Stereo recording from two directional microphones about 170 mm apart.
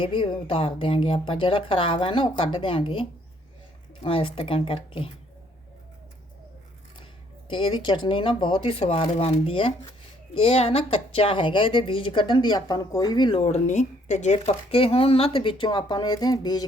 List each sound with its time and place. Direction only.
0.0 s a woman's voice: 30° left (ahead or behind)
7.5 s a woman's voice: 30° left (ahead or behind)